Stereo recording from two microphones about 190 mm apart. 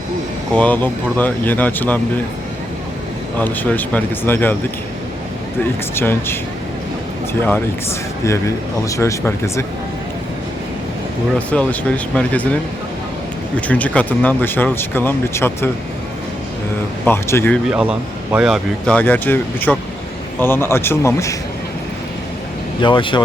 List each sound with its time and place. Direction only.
0.5 s speech: 10° left (ahead or behind)
3.4 s speech: 10° left (ahead or behind)
5.9 s speech: 10° left (ahead or behind)
8.2 s speech: 15° left (ahead or behind)
11.3 s speech: 5° left (ahead or behind)
13.6 s speech: 5° left (ahead or behind)
17.1 s speech: 15° left (ahead or behind)
17.7 s speech: 5° right (ahead or behind); by 21.3 s 15° left (ahead or behind)
22.8 s speech: 25° left (ahead or behind)